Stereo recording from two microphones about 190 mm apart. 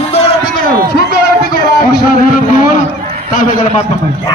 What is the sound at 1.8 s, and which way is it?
Music, 50° left (ahead or behind).